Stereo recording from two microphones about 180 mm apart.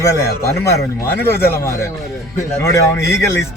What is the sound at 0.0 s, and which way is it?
Speech, 15° left (ahead or behind).